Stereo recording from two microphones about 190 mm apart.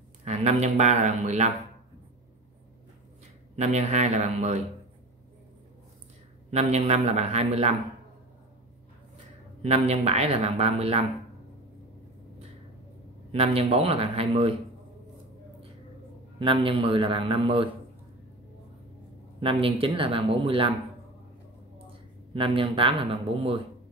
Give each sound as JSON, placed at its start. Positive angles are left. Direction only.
{"t": 0.2, "sound": "speech", "side_deg": -35}
{"t": 3.5, "sound": "speech", "side_deg": -35}
{"t": 6.5, "sound": "speech", "side_deg": -35}
{"t": 9.6, "sound": "speech", "side_deg": -35}
{"t": 13.3, "sound": "speech", "side_deg": -30}
{"t": 16.3, "sound": "speech", "side_deg": -25}
{"t": 19.4, "sound": "speech", "side_deg": -30}
{"t": 22.3, "sound": "speech", "side_deg": -30}